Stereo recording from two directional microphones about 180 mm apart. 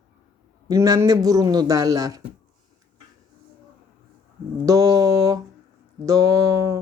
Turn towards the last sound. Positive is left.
turn(degrees=-15)  # may be behind; listen again after turning